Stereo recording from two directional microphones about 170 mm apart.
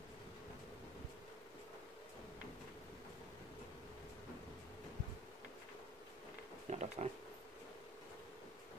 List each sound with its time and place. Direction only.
6.7 s speech: 40° right (ahead or behind)